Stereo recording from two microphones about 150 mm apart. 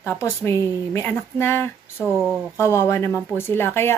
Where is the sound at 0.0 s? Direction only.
15° left (ahead or behind).